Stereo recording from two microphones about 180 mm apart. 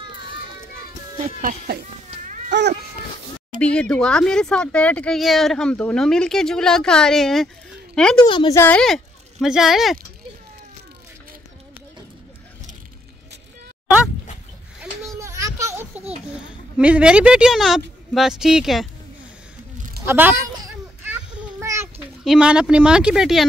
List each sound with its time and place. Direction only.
1.2 s speech: 50° right (ahead or behind)
3.6 s a woman's voice: 5° left (ahead or behind)
8.3 s a woman's voice: 25° left (ahead or behind)
8.5 s speech: 5° left (ahead or behind)
15.1 s children playing: 15° right (ahead or behind)
16.3 s speech: 5° right (ahead or behind)
20.1 s speech: 10° right (ahead or behind)
21.1 s a sound: 5° right (ahead or behind)
22.2 s speech: 5° right (ahead or behind)